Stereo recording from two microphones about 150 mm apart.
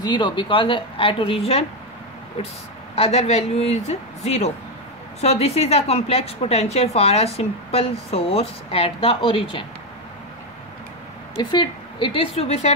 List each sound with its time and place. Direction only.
0.0 s a woman's voice: 30° left (ahead or behind)
3.0 s a woman's voice: 45° left (ahead or behind)
11.3 s a woman's voice: 35° left (ahead or behind)